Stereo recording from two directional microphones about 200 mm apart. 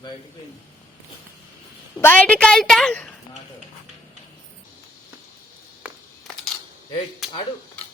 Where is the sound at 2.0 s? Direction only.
5° left (ahead or behind).